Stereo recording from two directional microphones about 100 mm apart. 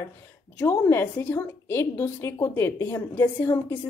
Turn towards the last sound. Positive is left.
turn(degrees=25)  # may be behind; listen again after turning